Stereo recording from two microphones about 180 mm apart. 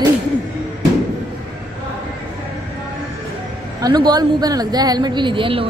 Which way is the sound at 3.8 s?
20° right (ahead or behind).